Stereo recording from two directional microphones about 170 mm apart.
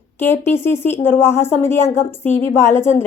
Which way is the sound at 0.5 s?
15° left (ahead or behind).